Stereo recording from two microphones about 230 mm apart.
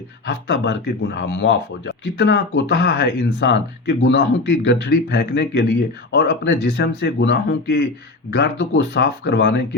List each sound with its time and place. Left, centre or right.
0.3 s speech: left